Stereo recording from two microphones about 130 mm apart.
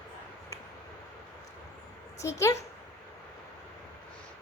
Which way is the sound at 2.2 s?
25° left (ahead or behind).